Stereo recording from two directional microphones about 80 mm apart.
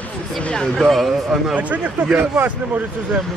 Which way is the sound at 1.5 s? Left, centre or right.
Centre.